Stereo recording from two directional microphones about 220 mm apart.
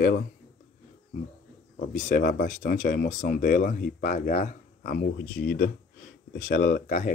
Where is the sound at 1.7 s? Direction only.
40° left (ahead or behind).